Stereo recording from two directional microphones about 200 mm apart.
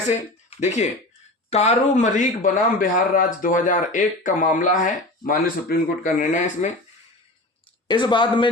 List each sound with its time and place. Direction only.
0.1 s speech: 35° left (ahead or behind)
7.9 s speech: 20° left (ahead or behind)